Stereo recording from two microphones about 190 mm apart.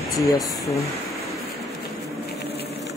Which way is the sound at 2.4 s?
60° left (ahead or behind).